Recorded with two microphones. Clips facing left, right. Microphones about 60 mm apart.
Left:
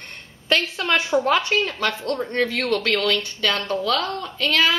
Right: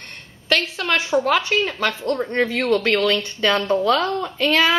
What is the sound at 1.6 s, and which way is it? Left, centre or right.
Speech, centre.